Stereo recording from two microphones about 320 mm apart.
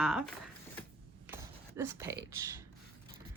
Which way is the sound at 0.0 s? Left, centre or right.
Centre.